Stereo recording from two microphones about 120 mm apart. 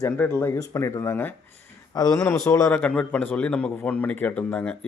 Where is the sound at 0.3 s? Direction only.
25° left (ahead or behind).